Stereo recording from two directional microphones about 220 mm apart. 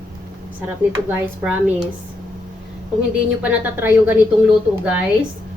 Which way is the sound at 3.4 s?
10° right (ahead or behind).